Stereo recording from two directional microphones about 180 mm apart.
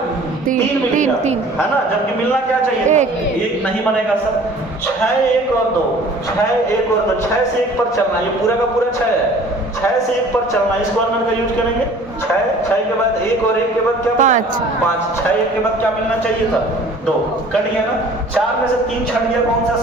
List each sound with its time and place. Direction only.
0.4 s a woman's voice: 45° right (ahead or behind)
2.8 s speech: 40° right (ahead or behind)
14.2 s a woman's voice: 45° right (ahead or behind)